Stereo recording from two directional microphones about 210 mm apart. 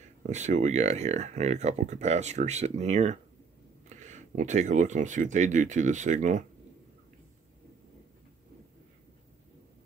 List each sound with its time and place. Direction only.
0.3 s speech: 35° right (ahead or behind)